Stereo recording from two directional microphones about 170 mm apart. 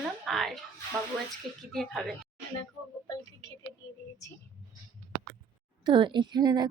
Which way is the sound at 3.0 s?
20° left (ahead or behind).